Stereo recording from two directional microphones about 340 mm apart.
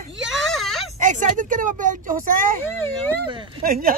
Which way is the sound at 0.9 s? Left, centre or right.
Right.